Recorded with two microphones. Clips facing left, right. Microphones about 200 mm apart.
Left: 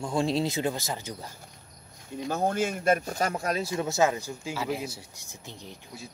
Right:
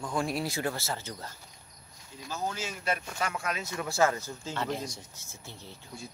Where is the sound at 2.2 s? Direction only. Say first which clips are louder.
Left 8 dB; 55° left (ahead or behind); by 3.7 s 35° left (ahead or behind).